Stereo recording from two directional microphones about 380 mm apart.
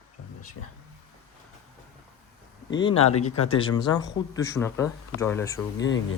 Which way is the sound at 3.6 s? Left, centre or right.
Centre.